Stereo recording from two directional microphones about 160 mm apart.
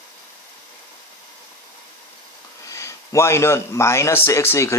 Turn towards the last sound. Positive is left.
turn(degrees=15)  # may be behind; listen again after turning